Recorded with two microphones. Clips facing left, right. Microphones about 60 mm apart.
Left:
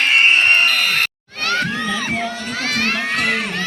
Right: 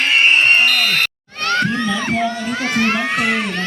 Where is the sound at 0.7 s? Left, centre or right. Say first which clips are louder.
Right 1 dB; centre.